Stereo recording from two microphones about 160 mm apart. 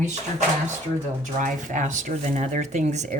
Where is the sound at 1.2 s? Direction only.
50° right (ahead or behind).